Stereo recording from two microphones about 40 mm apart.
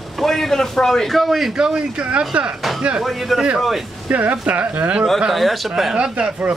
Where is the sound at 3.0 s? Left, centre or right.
Centre.